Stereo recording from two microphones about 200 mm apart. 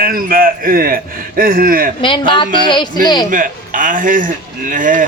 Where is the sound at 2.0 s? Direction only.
25° left (ahead or behind).